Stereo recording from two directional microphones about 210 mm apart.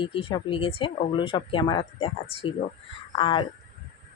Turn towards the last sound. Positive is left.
turn(degrees=25)  # may be behind; listen again after turning